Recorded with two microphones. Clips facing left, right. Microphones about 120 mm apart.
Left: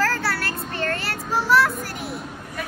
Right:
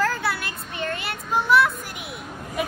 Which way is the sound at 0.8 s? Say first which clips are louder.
Left 2 dB; 15° right (ahead or behind).